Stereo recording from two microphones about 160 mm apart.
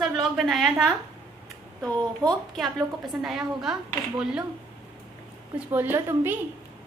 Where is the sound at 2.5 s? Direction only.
Centre (ahead or behind).